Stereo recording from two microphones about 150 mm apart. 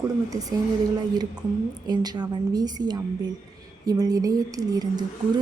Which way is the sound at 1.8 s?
25° right (ahead or behind).